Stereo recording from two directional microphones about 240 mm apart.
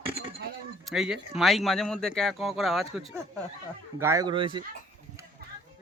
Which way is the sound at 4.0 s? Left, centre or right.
Centre.